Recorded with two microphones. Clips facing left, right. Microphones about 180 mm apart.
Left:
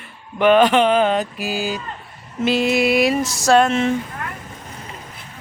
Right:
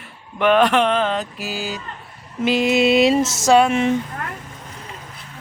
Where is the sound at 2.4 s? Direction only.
15° right (ahead or behind).